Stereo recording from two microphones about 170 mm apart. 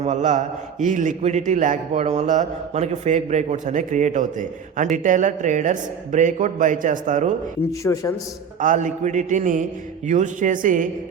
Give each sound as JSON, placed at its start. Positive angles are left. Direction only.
{"t": 0.0, "sound": "a man's voice", "side_deg": -45}
{"t": 7.9, "sound": "a man's voice", "side_deg": 10}
{"t": 8.6, "sound": "a man's voice", "side_deg": -50}